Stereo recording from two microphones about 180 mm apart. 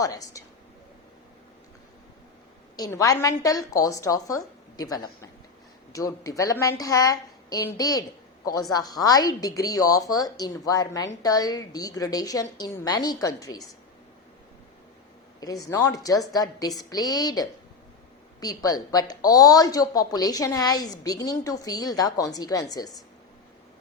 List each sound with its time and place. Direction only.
0.0 s a woman's voice: 20° left (ahead or behind)
2.7 s a woman's voice: 20° left (ahead or behind)
15.4 s a woman's voice: 20° left (ahead or behind)